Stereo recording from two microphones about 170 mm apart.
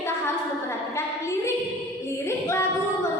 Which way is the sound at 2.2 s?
15° left (ahead or behind).